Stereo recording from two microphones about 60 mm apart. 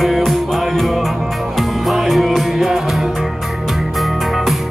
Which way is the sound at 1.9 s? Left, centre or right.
Centre.